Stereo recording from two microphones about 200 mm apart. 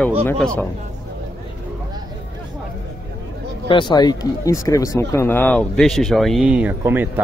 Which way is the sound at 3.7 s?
25° left (ahead or behind).